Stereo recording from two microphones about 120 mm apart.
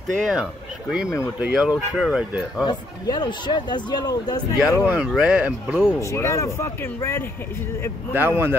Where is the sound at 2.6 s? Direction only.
35° left (ahead or behind).